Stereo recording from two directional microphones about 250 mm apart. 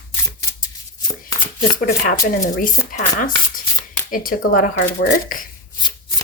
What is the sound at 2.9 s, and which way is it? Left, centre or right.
A woman's voice, left.